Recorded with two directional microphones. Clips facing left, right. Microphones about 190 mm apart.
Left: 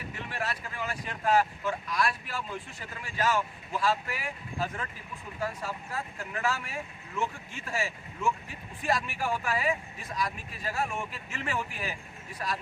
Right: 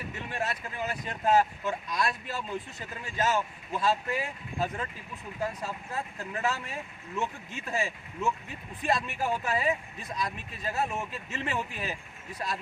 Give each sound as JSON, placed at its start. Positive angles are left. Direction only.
{"t": 0.3, "sound": "speech", "side_deg": -20}